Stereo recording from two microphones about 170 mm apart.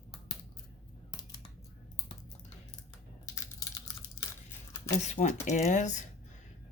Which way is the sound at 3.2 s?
20° left (ahead or behind).